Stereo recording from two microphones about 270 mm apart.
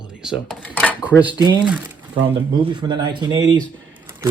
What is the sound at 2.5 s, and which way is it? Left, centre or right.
Speech, centre.